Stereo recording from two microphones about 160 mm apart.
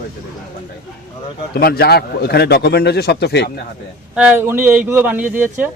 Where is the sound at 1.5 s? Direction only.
75° left (ahead or behind); by 3.5 s 90° left.